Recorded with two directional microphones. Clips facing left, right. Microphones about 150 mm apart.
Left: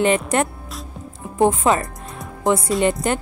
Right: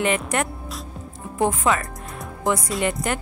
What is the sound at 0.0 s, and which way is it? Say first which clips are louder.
Speech: left 5 dB; 30° left (ahead or behind).